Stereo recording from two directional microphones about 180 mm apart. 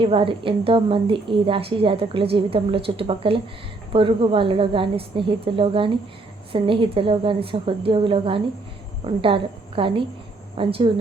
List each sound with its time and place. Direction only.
0.0 s a woman's voice: 30° right (ahead or behind)